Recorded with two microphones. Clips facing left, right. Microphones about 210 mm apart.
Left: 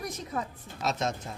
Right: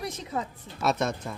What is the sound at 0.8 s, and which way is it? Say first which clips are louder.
Speech: right 4 dB; 60° right (ahead or behind).